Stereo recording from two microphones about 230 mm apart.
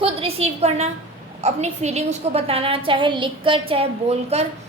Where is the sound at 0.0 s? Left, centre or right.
Right.